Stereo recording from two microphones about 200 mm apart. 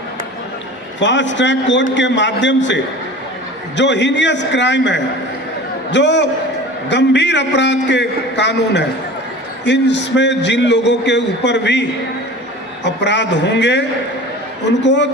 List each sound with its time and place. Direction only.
0.9 s a man's voice: 65° left (ahead or behind)